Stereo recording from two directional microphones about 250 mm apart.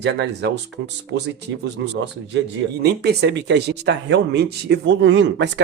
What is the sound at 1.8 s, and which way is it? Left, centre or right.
Speech, right.